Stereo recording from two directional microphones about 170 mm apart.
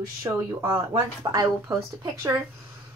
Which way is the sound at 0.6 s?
20° right (ahead or behind).